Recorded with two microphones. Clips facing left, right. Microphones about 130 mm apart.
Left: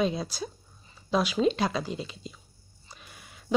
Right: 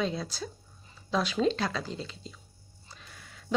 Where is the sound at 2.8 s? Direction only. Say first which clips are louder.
Left 1 dB; 15° left (ahead or behind).